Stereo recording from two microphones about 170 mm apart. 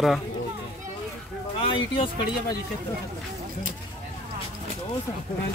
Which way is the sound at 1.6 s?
30° left (ahead or behind).